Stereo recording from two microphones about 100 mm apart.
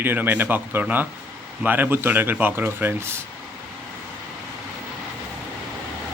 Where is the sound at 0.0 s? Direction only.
20° right (ahead or behind).